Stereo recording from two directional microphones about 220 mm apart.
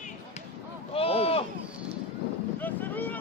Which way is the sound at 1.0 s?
25° left (ahead or behind).